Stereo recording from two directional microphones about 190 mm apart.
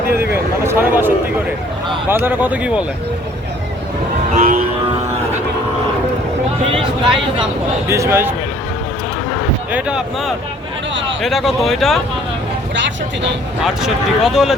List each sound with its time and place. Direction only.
0.0 s a sound: 55° right (ahead or behind)
0.6 s a man's voice: 10° right (ahead or behind)
4.4 s music: 45° right (ahead or behind)
6.7 s speech: 25° right (ahead or behind)
7.9 s speech: 15° right (ahead or behind)
9.7 s speech: 5° right (ahead or behind)
12.7 s speech: 70° right (ahead or behind)
13.7 s speech: centre (ahead or behind)